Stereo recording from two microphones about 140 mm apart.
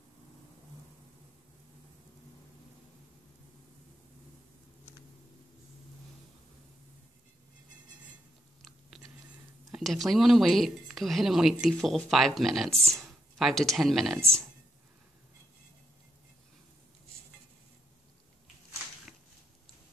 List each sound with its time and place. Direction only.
8.9 s a sound: centre (ahead or behind)
9.7 s speech: centre (ahead or behind)
14.1 s speech: 20° right (ahead or behind)